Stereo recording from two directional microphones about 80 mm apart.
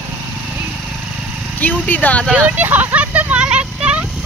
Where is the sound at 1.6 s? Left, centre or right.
Left.